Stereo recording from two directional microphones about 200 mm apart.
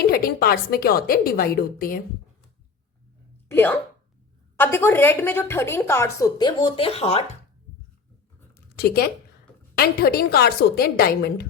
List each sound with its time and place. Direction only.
0.1 s a woman's voice: 50° left (ahead or behind)
3.5 s a woman's voice: 10° left (ahead or behind); by 7.3 s 30° left (ahead or behind)
8.8 s a woman's voice: 50° left (ahead or behind)